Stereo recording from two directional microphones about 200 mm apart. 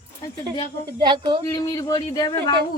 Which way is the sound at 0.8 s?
20° right (ahead or behind).